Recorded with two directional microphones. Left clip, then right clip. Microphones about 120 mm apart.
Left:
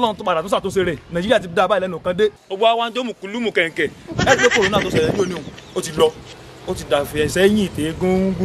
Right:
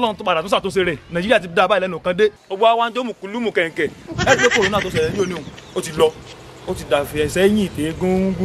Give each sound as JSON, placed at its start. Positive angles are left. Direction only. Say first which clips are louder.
{"t": 0.0, "sound": "a man's voice", "louder": "even", "side_deg": 5}
{"t": 2.5, "sound": "a man's voice", "louder": "right 1 dB", "side_deg": 20}
{"t": 4.2, "sound": "a man's voice", "louder": "even", "side_deg": 0}